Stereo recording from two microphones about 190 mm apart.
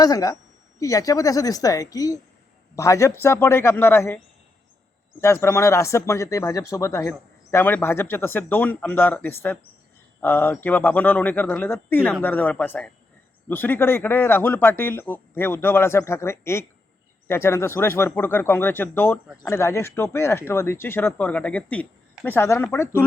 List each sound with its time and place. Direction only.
0.0 s a woman's voice: 20° left (ahead or behind)
5.2 s speech: 15° left (ahead or behind)